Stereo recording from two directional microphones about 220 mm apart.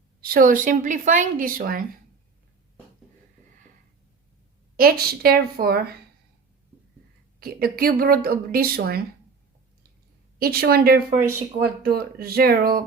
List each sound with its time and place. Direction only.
0.2 s a woman's voice: 40° right (ahead or behind)
4.8 s a woman's voice: 45° right (ahead or behind)
7.3 s a woman's voice: 45° right (ahead or behind)
10.3 s a woman's voice: 45° right (ahead or behind)
11.2 s speech: 10° right (ahead or behind)
11.6 s a woman's voice: 45° right (ahead or behind)